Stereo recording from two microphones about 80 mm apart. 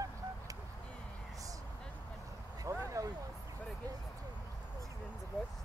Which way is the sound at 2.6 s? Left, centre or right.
Right.